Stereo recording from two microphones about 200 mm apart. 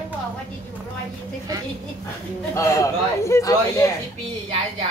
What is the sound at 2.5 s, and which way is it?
Speech, 15° left (ahead or behind).